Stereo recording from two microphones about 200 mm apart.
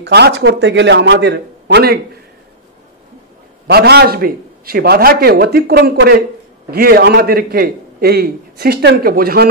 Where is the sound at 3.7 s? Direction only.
55° right (ahead or behind).